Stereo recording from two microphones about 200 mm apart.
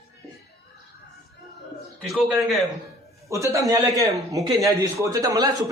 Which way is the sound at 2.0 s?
Centre (ahead or behind).